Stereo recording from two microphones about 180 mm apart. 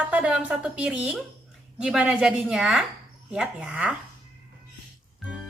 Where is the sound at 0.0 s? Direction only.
5° right (ahead or behind).